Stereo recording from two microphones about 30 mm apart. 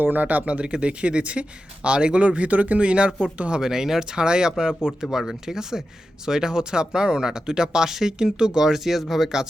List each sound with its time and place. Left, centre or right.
0.0 s speech: right
0.4 s speech: right
2.2 s speech: right
3.6 s speech: centre